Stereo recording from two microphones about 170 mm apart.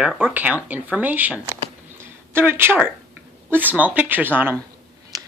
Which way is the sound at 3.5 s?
10° right (ahead or behind).